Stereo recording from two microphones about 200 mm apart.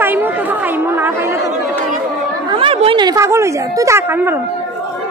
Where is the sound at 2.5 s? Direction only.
25° right (ahead or behind).